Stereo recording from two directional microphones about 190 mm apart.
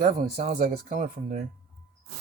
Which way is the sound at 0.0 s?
45° right (ahead or behind).